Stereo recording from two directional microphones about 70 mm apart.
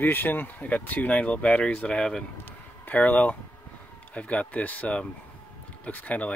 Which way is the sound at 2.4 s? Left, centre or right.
Left.